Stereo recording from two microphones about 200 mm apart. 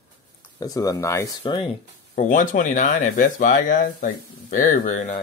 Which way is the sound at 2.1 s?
40° left (ahead or behind).